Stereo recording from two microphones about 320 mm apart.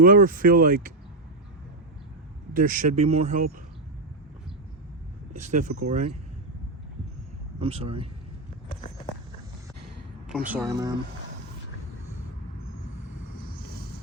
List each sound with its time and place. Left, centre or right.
0.0 s speech: right
2.5 s speech: right
5.4 s speech: right
7.6 s speech: centre
10.5 s speech: centre